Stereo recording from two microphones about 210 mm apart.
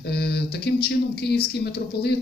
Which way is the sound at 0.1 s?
50° left (ahead or behind).